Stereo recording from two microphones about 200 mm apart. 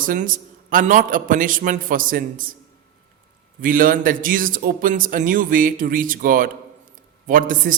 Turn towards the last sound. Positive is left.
turn(degrees=-40)  # may be behind; listen again after turning